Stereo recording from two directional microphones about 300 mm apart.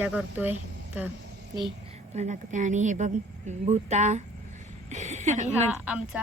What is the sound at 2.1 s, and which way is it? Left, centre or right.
A woman's voice, right.